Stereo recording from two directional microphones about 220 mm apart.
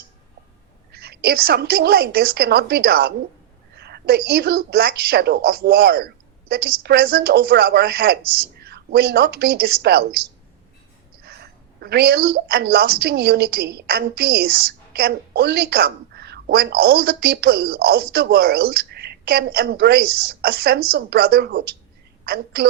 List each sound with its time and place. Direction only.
0.9 s a woman's voice: 45° right (ahead or behind)